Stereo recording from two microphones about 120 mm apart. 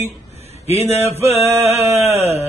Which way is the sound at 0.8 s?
20° right (ahead or behind).